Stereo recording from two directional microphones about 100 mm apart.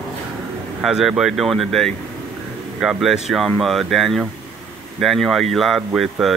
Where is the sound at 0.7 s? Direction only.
5° right (ahead or behind).